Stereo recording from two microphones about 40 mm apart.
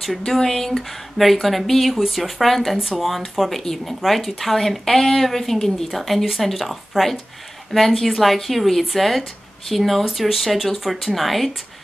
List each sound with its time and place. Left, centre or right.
0.0 s speech: centre